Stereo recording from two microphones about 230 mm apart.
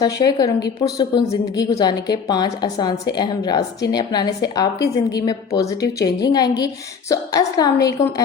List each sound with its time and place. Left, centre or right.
0.0 s a woman's voice: centre